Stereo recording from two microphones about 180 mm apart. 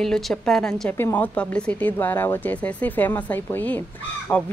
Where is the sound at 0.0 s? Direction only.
5° left (ahead or behind).